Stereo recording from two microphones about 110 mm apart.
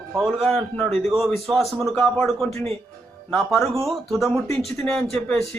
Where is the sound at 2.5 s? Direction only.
25° left (ahead or behind).